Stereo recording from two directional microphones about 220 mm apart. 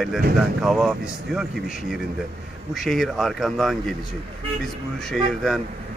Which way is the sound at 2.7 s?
Centre (ahead or behind).